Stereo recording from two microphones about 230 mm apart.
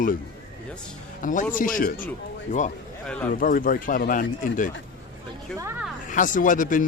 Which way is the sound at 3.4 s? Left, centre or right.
Left.